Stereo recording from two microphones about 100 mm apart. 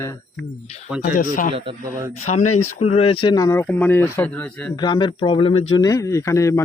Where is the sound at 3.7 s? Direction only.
20° left (ahead or behind).